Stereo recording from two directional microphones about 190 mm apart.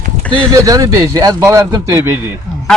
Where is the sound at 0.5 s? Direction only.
20° right (ahead or behind).